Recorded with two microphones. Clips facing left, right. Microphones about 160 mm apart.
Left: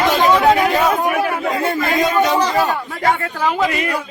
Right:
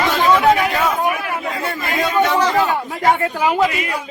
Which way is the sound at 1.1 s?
50° left (ahead or behind).